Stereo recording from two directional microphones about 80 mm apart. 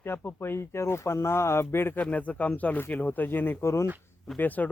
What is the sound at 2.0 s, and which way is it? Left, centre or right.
Speech, centre.